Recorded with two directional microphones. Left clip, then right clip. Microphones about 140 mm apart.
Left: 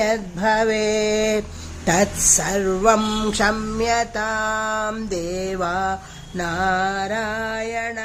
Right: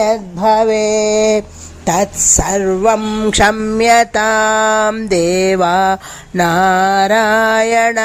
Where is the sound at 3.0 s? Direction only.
15° right (ahead or behind).